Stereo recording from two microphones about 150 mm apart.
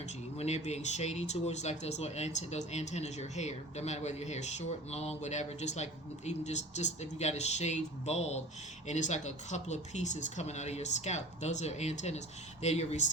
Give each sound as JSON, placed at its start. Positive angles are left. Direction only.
{"t": 0.3, "sound": "speech", "side_deg": 45}